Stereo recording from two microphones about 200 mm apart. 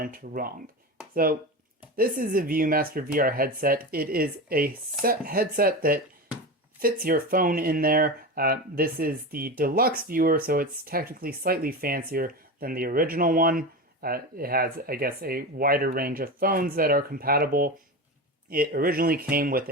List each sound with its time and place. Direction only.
0.0 s speech: 45° right (ahead or behind)